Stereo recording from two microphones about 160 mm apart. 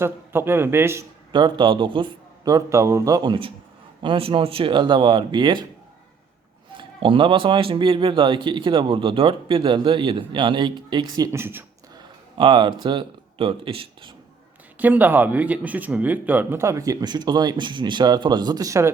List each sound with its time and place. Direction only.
0.0 s speech: 15° right (ahead or behind)
1.3 s a man's voice: 30° right (ahead or behind)
6.7 s a man's voice: 30° right (ahead or behind); by 11.6 s 15° right (ahead or behind)
12.4 s a man's voice: 30° right (ahead or behind)
14.8 s speech: 10° right (ahead or behind)